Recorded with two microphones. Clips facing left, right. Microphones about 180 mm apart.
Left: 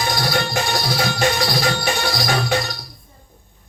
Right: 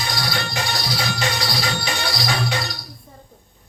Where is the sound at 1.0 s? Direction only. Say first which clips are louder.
Left 7 dB; 50° left (ahead or behind).